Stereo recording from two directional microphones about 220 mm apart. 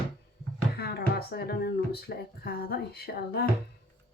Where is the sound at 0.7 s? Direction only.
45° left (ahead or behind).